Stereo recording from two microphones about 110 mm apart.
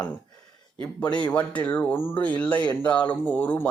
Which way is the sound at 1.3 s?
15° left (ahead or behind).